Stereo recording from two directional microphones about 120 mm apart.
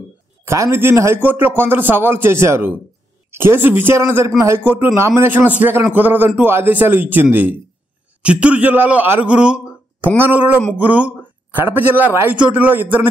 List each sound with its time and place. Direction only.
0.5 s a man's voice: 20° right (ahead or behind)